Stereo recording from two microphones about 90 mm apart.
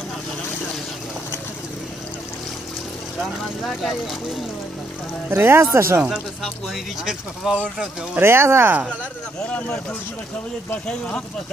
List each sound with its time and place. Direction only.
3.6 s speech: centre (ahead or behind)
5.3 s speech: 25° right (ahead or behind)
6.4 s speech: centre (ahead or behind)
8.1 s speech: 25° right (ahead or behind)
9.4 s speech: 15° left (ahead or behind)